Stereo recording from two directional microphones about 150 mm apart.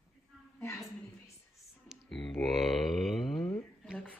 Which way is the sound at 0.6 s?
20° left (ahead or behind).